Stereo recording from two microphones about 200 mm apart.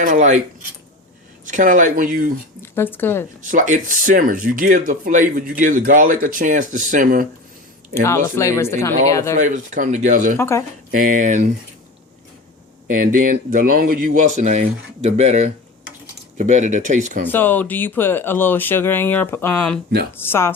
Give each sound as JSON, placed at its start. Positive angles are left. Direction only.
{"t": 0.0, "sound": "speech", "side_deg": -40}
{"t": 1.5, "sound": "speech", "side_deg": -40}
{"t": 2.6, "sound": "speech", "side_deg": 10}
{"t": 3.5, "sound": "speech", "side_deg": -40}
{"t": 7.9, "sound": "speech", "side_deg": 15}
{"t": 9.3, "sound": "speech", "side_deg": -40}
{"t": 10.3, "sound": "speech", "side_deg": 15}
{"t": 10.9, "sound": "speech", "side_deg": -40}
{"t": 12.9, "sound": "speech", "side_deg": -45}
{"t": 17.2, "sound": "speech", "side_deg": 10}